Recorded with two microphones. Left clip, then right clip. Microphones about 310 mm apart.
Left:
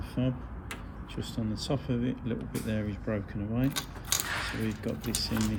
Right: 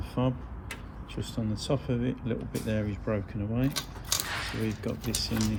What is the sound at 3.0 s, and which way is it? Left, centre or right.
Speech, right.